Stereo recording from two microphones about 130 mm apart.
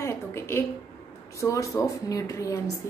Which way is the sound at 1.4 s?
25° left (ahead or behind).